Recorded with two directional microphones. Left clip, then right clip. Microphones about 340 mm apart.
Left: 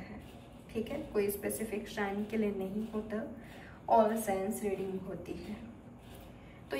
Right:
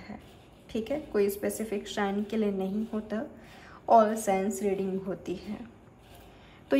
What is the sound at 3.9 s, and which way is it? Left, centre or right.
Speech, centre.